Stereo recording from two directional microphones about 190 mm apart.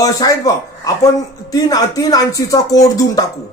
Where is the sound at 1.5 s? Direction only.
20° left (ahead or behind).